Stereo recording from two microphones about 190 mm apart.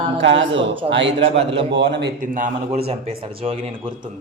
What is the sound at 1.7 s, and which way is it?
Speech, 65° right (ahead or behind).